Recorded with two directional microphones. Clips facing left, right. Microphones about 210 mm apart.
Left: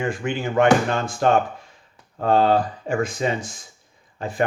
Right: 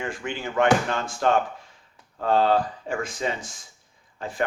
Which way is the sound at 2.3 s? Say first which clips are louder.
Left 3 dB; 15° left (ahead or behind).